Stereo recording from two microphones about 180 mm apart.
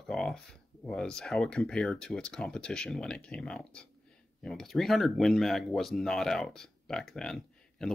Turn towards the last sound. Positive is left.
turn(degrees=5)  # may be behind; listen again after turning